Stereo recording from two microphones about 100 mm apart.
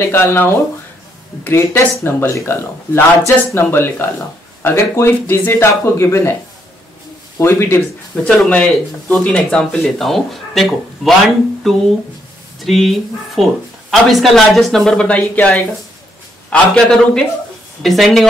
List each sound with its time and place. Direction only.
0.1 s speech: 25° left (ahead or behind)
7.3 s speech: 25° left (ahead or behind)
8.2 s a man's voice: 10° left (ahead or behind)